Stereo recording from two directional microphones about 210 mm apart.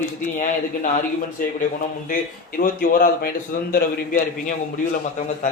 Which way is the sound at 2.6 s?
40° left (ahead or behind).